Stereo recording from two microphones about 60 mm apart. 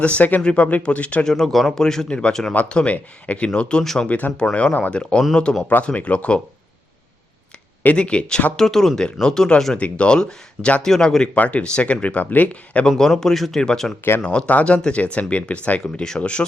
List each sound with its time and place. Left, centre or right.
0.0 s speech: left
1.3 s speech: centre
4.5 s speech: left
7.9 s speech: centre
8.5 s speech: centre
9.7 s speech: centre
10.8 s speech: centre
11.3 s speech: left
13.0 s speech: centre
15.8 s speech: centre